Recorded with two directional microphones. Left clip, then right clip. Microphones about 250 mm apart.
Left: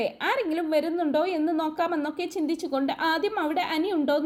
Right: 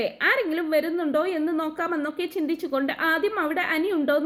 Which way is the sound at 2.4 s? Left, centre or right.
Left.